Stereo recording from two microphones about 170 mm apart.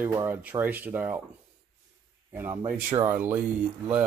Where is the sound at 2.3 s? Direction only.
15° right (ahead or behind).